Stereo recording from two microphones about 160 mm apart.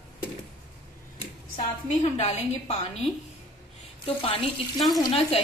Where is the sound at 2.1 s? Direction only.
35° left (ahead or behind).